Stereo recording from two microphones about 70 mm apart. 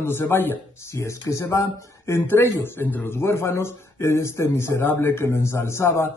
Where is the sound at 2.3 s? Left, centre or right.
Left.